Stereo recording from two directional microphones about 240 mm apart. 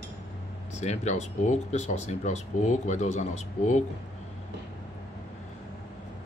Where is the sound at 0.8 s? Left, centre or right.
Left.